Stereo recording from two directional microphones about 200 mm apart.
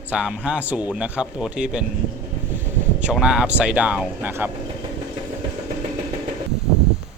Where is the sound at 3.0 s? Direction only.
5° right (ahead or behind).